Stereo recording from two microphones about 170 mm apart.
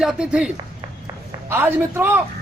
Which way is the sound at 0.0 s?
5° right (ahead or behind).